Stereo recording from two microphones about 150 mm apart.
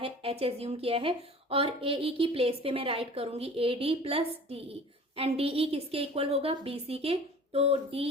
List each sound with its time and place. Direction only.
0.0 s a woman's voice: 40° right (ahead or behind)